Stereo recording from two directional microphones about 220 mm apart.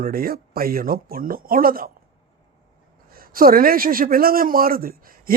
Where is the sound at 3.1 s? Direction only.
40° right (ahead or behind).